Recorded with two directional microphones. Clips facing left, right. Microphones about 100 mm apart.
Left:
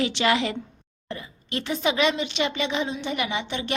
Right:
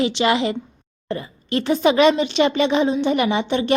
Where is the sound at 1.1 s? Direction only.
40° right (ahead or behind).